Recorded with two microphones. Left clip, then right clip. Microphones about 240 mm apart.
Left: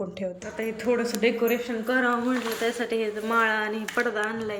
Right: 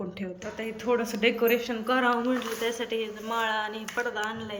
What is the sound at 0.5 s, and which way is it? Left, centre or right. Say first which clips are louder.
A woman's voice: left 1 dB; centre.